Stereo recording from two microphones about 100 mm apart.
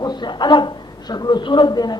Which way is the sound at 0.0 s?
45° left (ahead or behind).